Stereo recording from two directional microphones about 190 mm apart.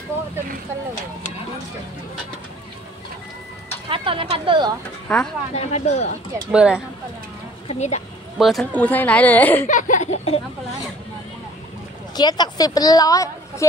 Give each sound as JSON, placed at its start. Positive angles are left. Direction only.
{"t": 3.9, "sound": "speech", "side_deg": -30}
{"t": 5.0, "sound": "speech", "side_deg": 5}
{"t": 5.5, "sound": "speech", "side_deg": 35}
{"t": 6.4, "sound": "speech", "side_deg": -5}
{"t": 7.6, "sound": "speech", "side_deg": 35}
{"t": 8.4, "sound": "speech", "side_deg": 0}
{"t": 9.7, "sound": "speech", "side_deg": 40}
{"t": 12.2, "sound": "a woman's voice", "side_deg": 20}